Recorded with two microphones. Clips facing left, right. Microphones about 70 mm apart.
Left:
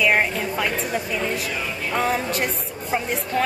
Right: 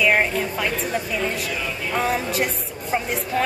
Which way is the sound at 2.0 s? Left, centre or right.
Centre.